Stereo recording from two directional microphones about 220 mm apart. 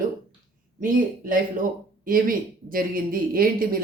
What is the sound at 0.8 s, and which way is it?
Speech, 40° right (ahead or behind).